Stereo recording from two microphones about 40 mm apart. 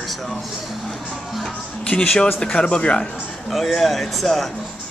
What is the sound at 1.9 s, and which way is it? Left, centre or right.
Speech, left.